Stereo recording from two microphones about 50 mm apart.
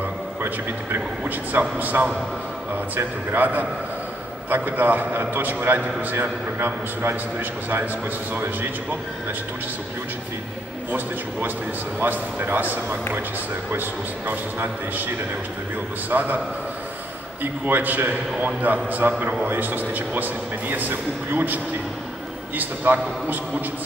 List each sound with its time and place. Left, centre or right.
1.2 s a man's voice: right
12.0 s a man's voice: right
16.1 s a man's voice: right
17.4 s a man's voice: right
22.6 s a man's voice: right